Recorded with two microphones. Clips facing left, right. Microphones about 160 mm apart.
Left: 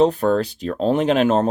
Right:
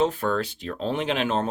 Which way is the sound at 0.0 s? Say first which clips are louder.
Left 7 dB; 40° left (ahead or behind).